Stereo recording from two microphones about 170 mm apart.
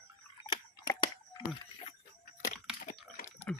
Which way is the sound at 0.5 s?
25° left (ahead or behind).